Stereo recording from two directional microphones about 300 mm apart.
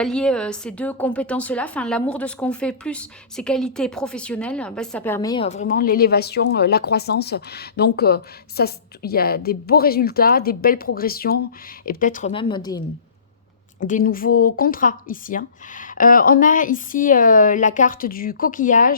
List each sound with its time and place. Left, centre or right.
0.0 s a woman's voice: centre
13.7 s a woman's voice: left